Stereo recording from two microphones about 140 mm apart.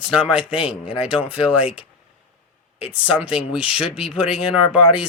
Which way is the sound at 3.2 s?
5° right (ahead or behind).